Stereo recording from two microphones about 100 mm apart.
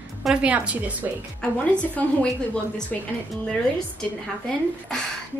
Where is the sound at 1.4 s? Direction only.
15° left (ahead or behind).